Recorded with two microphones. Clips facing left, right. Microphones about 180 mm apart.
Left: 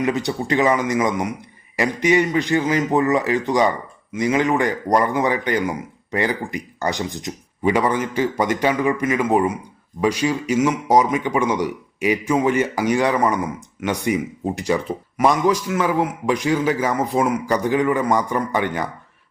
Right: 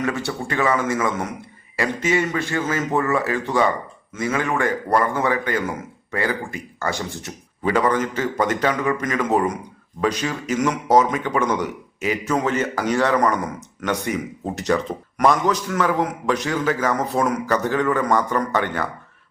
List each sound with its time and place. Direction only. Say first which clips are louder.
0.0 s a man's voice: left 3 dB; 15° left (ahead or behind)